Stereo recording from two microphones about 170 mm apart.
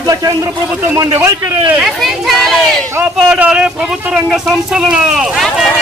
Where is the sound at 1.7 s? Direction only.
Centre (ahead or behind).